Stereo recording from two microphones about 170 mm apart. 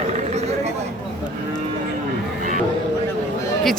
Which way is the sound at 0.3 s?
40° right (ahead or behind).